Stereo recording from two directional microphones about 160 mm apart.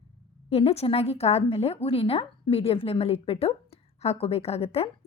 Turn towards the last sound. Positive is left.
turn(degrees=40)  # may be behind; listen again after turning